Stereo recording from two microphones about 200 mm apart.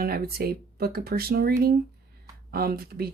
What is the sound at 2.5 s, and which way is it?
Speech, 50° right (ahead or behind).